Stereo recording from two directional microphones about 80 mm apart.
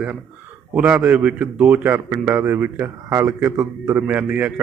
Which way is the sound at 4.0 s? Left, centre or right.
Right.